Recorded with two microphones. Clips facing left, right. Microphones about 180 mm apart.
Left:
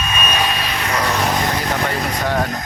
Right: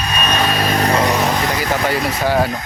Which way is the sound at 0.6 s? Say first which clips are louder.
Right 7 dB; 45° right (ahead or behind).